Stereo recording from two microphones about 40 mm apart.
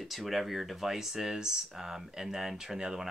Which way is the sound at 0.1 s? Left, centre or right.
Centre.